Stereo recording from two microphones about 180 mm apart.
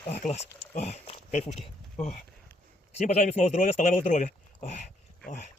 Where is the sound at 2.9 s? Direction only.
35° left (ahead or behind).